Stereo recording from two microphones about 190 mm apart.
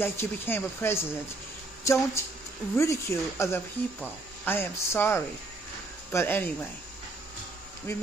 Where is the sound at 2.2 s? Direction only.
15° left (ahead or behind).